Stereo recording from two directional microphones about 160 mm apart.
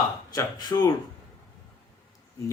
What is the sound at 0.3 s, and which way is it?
Speech, 25° left (ahead or behind).